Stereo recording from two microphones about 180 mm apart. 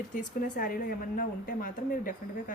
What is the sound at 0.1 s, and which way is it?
A woman's voice, 45° left (ahead or behind).